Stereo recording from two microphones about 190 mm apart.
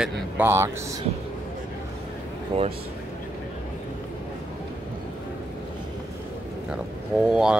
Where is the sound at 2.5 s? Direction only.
30° right (ahead or behind).